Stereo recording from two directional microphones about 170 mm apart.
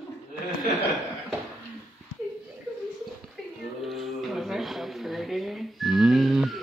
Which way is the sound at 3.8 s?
Centre (ahead or behind).